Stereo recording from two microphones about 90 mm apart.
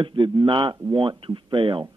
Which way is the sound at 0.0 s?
65° right (ahead or behind).